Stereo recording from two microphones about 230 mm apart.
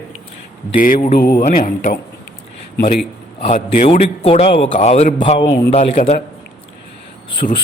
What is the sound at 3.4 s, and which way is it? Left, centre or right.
A man's voice, left.